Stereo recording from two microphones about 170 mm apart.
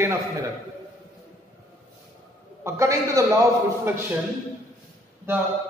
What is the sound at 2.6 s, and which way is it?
Speech, 15° right (ahead or behind).